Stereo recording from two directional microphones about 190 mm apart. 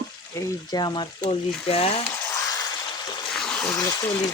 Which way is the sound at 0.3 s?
20° left (ahead or behind).